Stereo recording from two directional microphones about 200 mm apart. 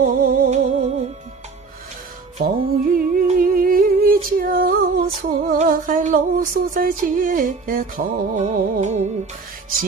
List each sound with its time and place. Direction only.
0.0 s music: 40° right (ahead or behind)
2.3 s music: 45° right (ahead or behind)